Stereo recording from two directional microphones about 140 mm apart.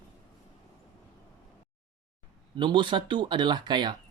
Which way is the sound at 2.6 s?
35° right (ahead or behind).